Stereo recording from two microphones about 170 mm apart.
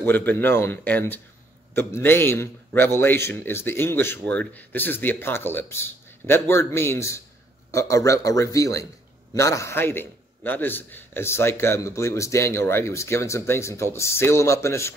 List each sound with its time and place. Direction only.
0.0 s a man's voice: 10° left (ahead or behind)